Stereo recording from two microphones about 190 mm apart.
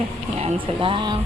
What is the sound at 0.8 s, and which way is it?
Speech, 25° right (ahead or behind).